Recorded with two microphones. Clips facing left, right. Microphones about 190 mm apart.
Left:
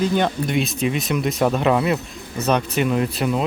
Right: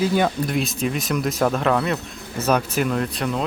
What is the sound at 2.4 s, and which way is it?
Speech, centre (ahead or behind).